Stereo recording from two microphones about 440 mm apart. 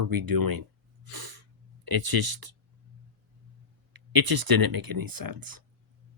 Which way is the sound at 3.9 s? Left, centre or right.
Right.